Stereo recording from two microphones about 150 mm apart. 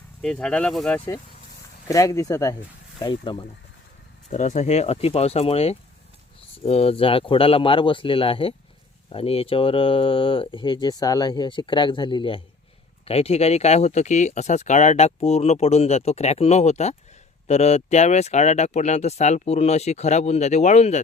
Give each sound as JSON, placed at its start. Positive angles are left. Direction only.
{"t": 0.2, "sound": "speech", "side_deg": 5}
{"t": 4.3, "sound": "speech", "side_deg": 55}